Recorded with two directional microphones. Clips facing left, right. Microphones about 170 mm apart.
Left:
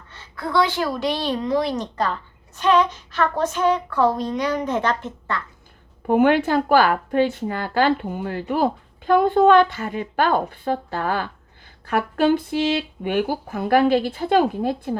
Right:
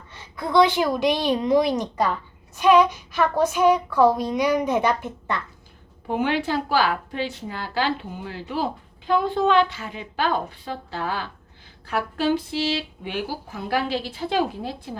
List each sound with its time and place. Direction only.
0.1 s speech: 15° right (ahead or behind)
6.1 s a woman's voice: 50° left (ahead or behind)